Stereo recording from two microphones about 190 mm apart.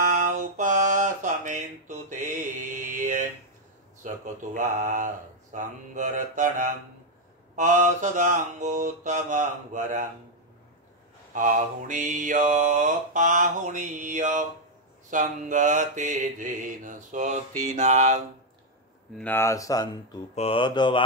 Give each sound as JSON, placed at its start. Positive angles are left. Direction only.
{"t": 0.1, "sound": "a sound", "side_deg": -40}
{"t": 4.0, "sound": "mantra", "side_deg": -40}
{"t": 11.3, "sound": "mantra", "side_deg": -45}
{"t": 19.1, "sound": "speech", "side_deg": 10}
{"t": 20.3, "sound": "mantra", "side_deg": 30}